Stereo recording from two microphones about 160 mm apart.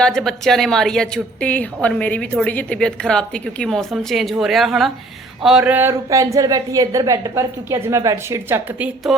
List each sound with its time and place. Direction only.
0.0 s a woman's voice: 5° left (ahead or behind); by 8.9 s 15° right (ahead or behind)
9.1 s a woman's voice: centre (ahead or behind)